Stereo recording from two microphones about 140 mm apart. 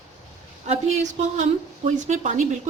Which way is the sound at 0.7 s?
55° right (ahead or behind).